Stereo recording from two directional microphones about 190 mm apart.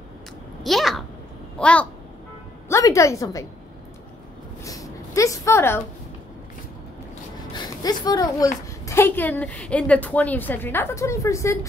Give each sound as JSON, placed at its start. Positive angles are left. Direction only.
{"t": 0.7, "sound": "a child's voice", "side_deg": 0}
{"t": 4.6, "sound": "speech", "side_deg": 15}
{"t": 7.5, "sound": "a woman's voice", "side_deg": 20}